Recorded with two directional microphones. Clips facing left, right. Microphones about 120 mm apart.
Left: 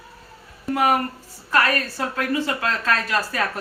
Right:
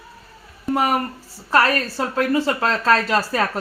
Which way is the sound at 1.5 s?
30° right (ahead or behind).